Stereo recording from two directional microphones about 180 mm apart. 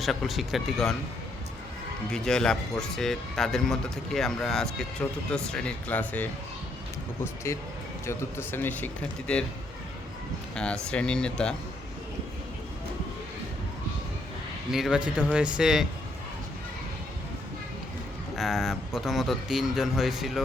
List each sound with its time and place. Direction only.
0.0 s speech: centre (ahead or behind)
2.0 s speech: 5° left (ahead or behind)
7.5 s speech: 15° left (ahead or behind)
10.5 s speech: 5° left (ahead or behind)
14.7 s speech: centre (ahead or behind)
18.3 s speech: centre (ahead or behind)